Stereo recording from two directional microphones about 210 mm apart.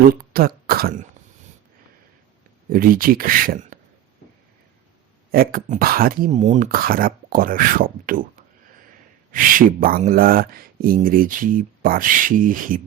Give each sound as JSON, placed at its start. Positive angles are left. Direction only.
{"t": 0.0, "sound": "speech", "side_deg": -45}
{"t": 2.6, "sound": "speech", "side_deg": -45}
{"t": 5.3, "sound": "speech", "side_deg": -45}
{"t": 9.3, "sound": "speech", "side_deg": -40}